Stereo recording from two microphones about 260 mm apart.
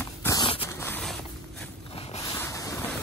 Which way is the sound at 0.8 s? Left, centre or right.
Centre.